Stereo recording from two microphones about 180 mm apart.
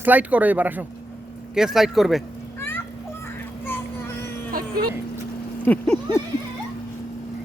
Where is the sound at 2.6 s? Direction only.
10° left (ahead or behind).